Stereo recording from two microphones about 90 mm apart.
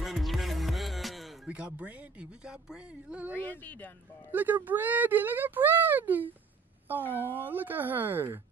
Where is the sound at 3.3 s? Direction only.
20° left (ahead or behind).